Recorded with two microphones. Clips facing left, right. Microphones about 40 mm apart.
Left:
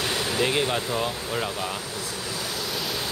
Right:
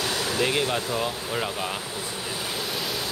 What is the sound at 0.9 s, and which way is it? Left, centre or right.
Speech, centre.